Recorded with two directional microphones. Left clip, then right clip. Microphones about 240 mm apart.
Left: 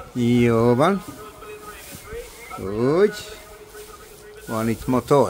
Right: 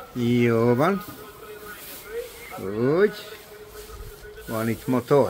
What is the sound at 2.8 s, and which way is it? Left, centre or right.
Speech, centre.